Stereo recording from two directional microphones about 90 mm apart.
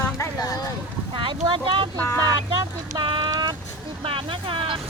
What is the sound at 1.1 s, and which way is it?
Speech, 65° right (ahead or behind).